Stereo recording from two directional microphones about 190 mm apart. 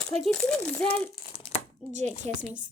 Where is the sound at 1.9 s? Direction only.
40° right (ahead or behind).